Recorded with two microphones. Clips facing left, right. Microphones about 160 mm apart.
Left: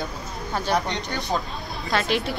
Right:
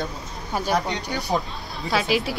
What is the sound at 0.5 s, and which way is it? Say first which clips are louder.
Speech: right 1 dB; 10° right (ahead or behind).